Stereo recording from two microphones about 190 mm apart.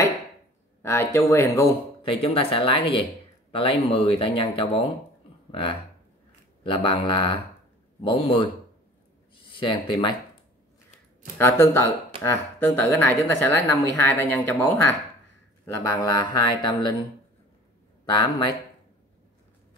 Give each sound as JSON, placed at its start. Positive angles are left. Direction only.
{"t": 0.8, "sound": "a woman's voice", "side_deg": 15}
{"t": 2.2, "sound": "speech", "side_deg": 30}
{"t": 9.6, "sound": "speech", "side_deg": 25}
{"t": 11.3, "sound": "a woman's voice", "side_deg": 15}
{"t": 18.1, "sound": "speech", "side_deg": 20}